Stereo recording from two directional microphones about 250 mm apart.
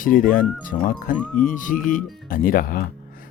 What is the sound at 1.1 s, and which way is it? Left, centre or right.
Speech, centre.